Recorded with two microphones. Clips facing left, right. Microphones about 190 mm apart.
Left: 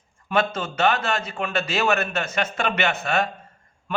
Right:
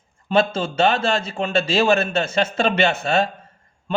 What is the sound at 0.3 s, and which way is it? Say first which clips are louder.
A man's voice: right 4 dB; 30° right (ahead or behind).